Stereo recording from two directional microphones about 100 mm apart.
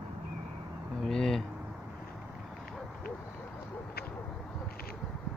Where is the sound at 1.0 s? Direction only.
5° left (ahead or behind).